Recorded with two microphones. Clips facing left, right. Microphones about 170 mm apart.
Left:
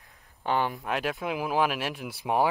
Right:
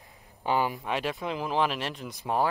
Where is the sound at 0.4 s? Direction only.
10° right (ahead or behind).